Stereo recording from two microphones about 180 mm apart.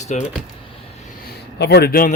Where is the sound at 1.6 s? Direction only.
65° left (ahead or behind).